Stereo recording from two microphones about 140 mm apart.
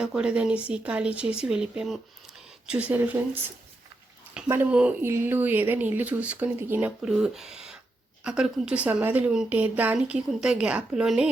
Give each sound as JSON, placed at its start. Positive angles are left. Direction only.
{"t": 0.0, "sound": "a woman's voice", "side_deg": -5}
{"t": 4.4, "sound": "a woman's voice", "side_deg": -15}